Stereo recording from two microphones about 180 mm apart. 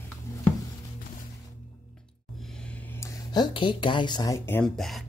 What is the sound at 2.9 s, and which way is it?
Speech, 25° left (ahead or behind).